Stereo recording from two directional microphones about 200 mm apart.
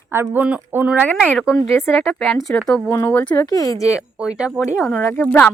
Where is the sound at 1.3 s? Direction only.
5° left (ahead or behind).